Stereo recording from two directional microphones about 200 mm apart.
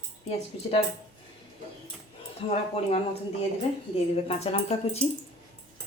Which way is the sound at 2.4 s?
30° left (ahead or behind).